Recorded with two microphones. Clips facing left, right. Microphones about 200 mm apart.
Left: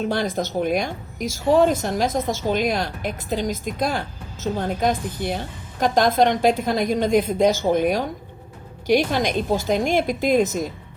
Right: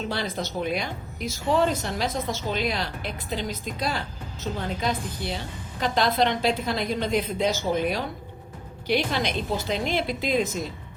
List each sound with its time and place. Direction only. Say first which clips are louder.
0.0 s a woman's voice: left 6 dB; 50° left (ahead or behind)